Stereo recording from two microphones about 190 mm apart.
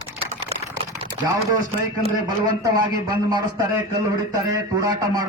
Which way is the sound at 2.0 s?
20° right (ahead or behind).